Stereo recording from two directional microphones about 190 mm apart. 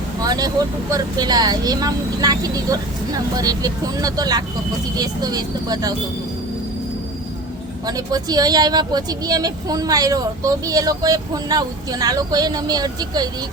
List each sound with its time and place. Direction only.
0.2 s speech: 20° right (ahead or behind)
7.9 s speech: 20° right (ahead or behind)